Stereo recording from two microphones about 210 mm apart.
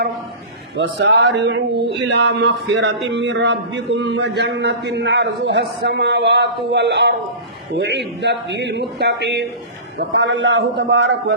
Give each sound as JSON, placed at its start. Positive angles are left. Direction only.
{"t": 0.8, "sound": "speech", "side_deg": -60}